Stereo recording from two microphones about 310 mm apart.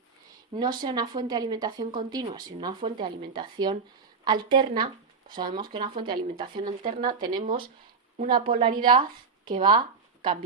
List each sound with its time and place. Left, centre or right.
0.5 s a woman's voice: centre
1.8 s a woman's voice: right
2.0 s a woman's voice: centre
6.8 s a woman's voice: right
7.2 s a woman's voice: centre
7.4 s a woman's voice: right